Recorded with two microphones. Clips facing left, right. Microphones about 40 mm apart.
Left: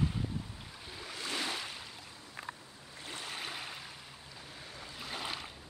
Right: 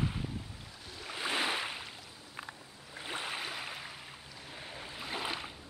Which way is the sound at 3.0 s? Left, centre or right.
Right.